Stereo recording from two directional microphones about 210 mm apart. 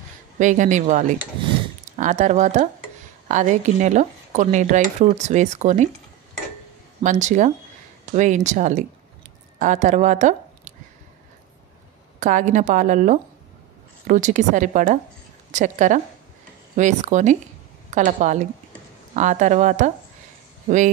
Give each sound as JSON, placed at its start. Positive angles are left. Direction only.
{"t": 0.4, "sound": "speech", "side_deg": -35}
{"t": 7.0, "sound": "speech", "side_deg": -35}
{"t": 12.2, "sound": "speech", "side_deg": -35}